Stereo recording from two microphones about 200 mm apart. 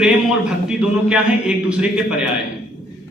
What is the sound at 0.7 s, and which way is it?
A man's voice, 5° right (ahead or behind).